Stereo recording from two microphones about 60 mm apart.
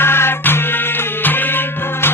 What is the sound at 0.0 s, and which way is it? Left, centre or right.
Music, left.